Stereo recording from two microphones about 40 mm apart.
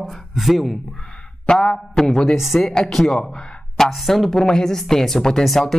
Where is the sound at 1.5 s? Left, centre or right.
Left.